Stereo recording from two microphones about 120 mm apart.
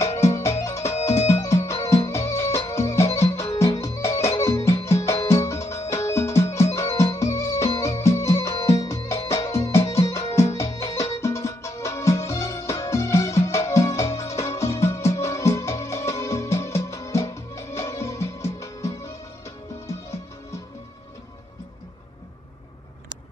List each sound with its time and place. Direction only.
0.0 s music: 25° left (ahead or behind)